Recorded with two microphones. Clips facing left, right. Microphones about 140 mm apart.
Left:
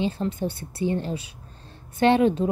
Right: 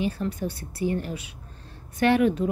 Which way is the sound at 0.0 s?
25° left (ahead or behind).